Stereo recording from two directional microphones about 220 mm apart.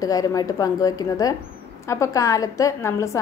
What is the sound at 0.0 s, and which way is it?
A woman's voice, 15° left (ahead or behind).